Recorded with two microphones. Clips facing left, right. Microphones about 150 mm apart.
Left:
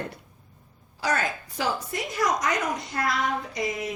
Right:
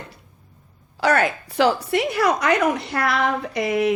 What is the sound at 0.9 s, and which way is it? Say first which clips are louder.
A woman's voice: right 8 dB; 70° right (ahead or behind).